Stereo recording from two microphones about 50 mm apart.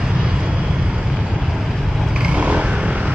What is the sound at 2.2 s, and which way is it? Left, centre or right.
Vehicle, right.